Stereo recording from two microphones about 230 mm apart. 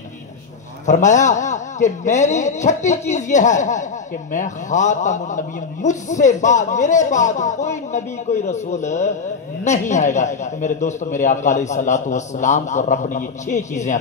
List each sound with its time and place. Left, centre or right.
0.8 s a man's voice: left